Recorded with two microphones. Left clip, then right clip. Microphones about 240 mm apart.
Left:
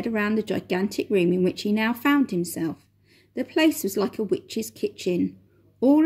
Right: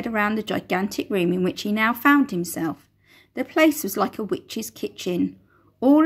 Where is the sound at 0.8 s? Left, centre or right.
Right.